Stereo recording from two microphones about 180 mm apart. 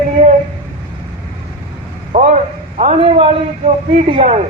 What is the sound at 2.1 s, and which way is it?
A man's voice, 40° right (ahead or behind).